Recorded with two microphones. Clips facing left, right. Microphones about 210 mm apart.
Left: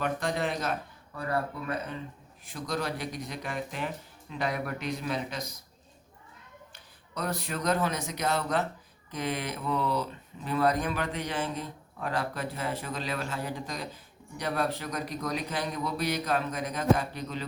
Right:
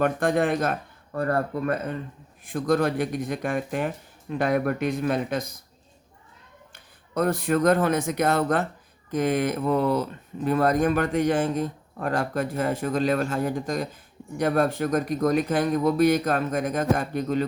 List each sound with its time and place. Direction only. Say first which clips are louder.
0.0 s speech: right 8 dB; 55° right (ahead or behind)
6.7 s speech: right 12 dB; 50° right (ahead or behind)